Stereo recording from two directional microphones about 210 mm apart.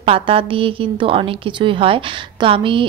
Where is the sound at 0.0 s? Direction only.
25° right (ahead or behind).